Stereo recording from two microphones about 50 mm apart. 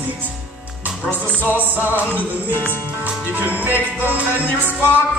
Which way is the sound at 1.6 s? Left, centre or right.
Right.